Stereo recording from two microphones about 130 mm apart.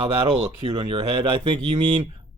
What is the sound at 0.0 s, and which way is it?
Speech, 40° right (ahead or behind).